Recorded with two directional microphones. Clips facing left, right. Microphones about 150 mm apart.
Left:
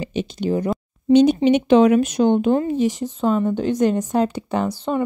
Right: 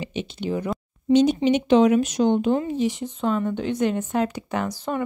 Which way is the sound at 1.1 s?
60° left (ahead or behind).